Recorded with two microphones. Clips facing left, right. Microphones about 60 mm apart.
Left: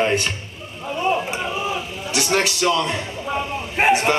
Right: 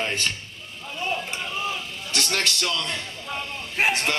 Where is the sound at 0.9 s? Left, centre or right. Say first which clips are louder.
Left 8 dB; left.